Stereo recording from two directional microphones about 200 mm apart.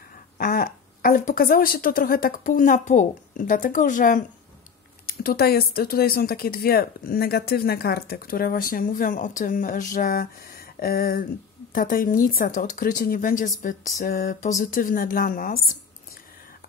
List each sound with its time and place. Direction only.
0.4 s speech: 45° left (ahead or behind)
13.6 s a sound: 40° left (ahead or behind)
14.6 s speech: 40° left (ahead or behind)